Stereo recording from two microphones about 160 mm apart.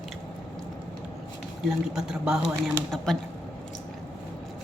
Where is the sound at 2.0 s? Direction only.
5° right (ahead or behind).